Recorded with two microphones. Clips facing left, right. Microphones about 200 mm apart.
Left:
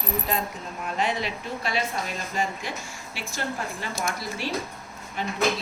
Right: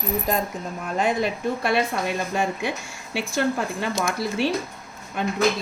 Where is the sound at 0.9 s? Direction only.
45° right (ahead or behind).